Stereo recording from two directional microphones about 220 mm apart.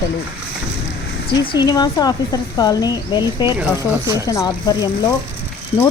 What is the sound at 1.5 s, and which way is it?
Speech, 20° left (ahead or behind).